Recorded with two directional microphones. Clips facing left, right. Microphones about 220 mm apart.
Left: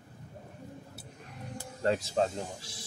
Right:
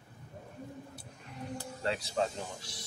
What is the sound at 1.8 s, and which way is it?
Speech, 45° left (ahead or behind).